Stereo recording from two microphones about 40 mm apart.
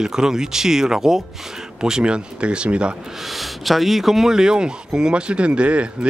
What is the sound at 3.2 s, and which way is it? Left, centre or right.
Speech, centre.